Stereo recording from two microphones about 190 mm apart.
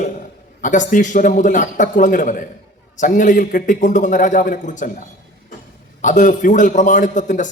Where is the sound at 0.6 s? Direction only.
40° left (ahead or behind).